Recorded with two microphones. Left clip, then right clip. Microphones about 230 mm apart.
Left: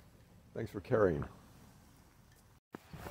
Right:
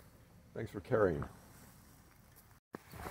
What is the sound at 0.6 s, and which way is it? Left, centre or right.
Speech, centre.